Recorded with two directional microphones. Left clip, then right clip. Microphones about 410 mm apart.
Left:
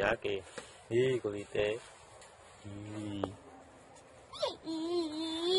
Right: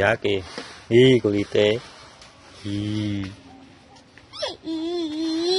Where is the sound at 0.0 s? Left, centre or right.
Centre.